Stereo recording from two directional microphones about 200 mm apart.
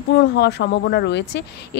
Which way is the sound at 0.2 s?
55° left (ahead or behind).